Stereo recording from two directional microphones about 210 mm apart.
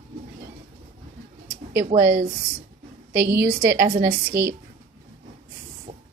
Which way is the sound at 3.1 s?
50° right (ahead or behind).